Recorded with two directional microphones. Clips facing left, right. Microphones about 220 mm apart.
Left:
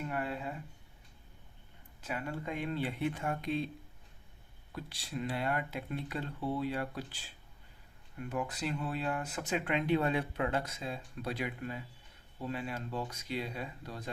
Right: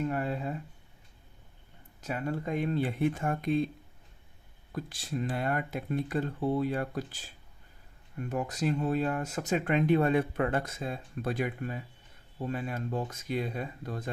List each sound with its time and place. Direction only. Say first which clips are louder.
0.1 s a sound: right 5 dB; 45° right (ahead or behind)
2.0 s speech: right 5 dB; 40° right (ahead or behind)
4.7 s speech: right 5 dB; 45° right (ahead or behind)